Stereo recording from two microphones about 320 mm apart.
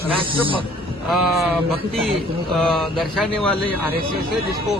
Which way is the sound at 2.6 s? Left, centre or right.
Centre.